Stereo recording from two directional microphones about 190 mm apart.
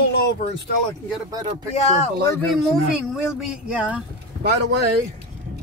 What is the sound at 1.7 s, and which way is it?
Speech, 35° left (ahead or behind).